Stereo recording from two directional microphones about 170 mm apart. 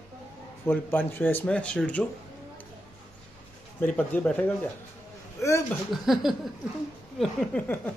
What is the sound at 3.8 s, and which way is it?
Speech, 10° left (ahead or behind).